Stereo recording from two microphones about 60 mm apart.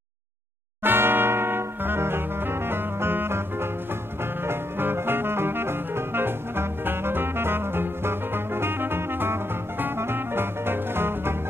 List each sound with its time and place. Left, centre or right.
0.8 s music: right